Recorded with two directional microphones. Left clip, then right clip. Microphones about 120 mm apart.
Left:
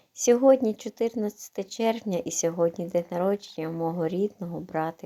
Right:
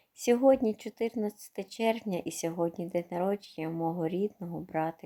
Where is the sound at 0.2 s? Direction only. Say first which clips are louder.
Left 5 dB; 20° right (ahead or behind).